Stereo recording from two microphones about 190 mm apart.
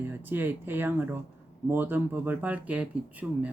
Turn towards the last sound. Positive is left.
turn(degrees=-10)  # may be behind; listen again after turning